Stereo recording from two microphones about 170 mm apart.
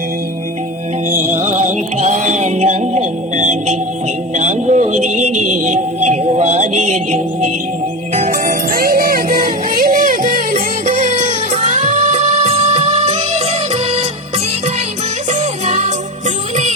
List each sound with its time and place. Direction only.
1.1 s music: 50° right (ahead or behind)
10.8 s music: 45° right (ahead or behind)
15.3 s music: 40° right (ahead or behind)